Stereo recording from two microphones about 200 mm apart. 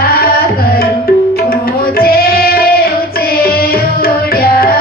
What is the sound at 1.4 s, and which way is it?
Music, 50° left (ahead or behind).